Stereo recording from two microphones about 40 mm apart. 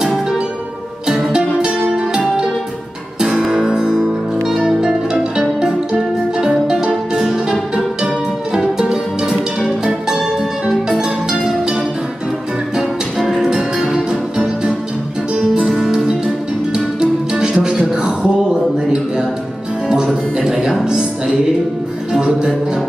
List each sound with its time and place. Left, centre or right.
1.0 s music: centre
1.7 s music: right
3.2 s guitar: centre
3.5 s music: centre
6.9 s music: centre
8.7 s music: centre
13.4 s music: centre
17.9 s a sound: right
20.3 s music: centre